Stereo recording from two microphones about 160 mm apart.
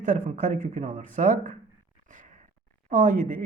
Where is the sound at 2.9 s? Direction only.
55° right (ahead or behind).